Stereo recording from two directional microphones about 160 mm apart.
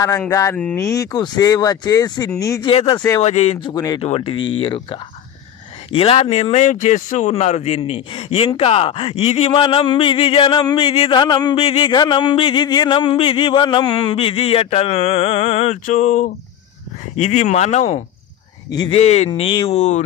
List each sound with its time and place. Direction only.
0.3 s speech: 20° left (ahead or behind)
2.7 s a man's voice: 35° left (ahead or behind)
3.6 s speech: 25° left (ahead or behind)
4.0 s a man's voice: 35° left (ahead or behind)